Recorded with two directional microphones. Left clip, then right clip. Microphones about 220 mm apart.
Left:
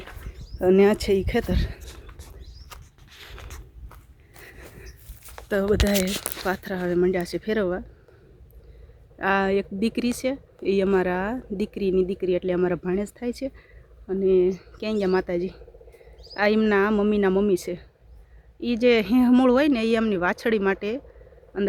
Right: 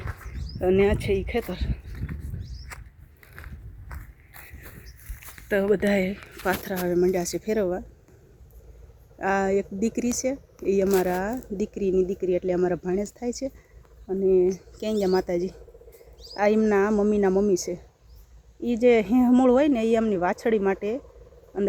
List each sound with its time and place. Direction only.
0.6 s speech: 25° left (ahead or behind)
5.5 s speech: 10° left (ahead or behind)
9.1 s speech: 20° left (ahead or behind)
14.8 s speech: centre (ahead or behind)
17.3 s speech: 15° left (ahead or behind)